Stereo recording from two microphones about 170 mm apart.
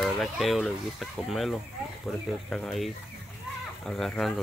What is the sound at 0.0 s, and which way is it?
Speech, centre (ahead or behind).